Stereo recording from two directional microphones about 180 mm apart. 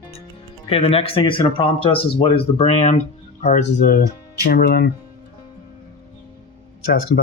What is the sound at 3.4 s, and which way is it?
Speech, 50° left (ahead or behind).